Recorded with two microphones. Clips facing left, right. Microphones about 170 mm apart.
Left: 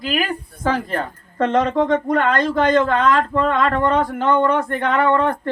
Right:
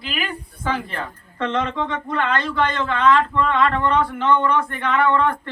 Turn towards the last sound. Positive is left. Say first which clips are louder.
# left 2 dB
turn(degrees=45)  # may be behind; listen again after turning